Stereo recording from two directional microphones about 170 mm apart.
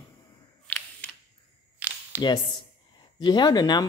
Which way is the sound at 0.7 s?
5° left (ahead or behind).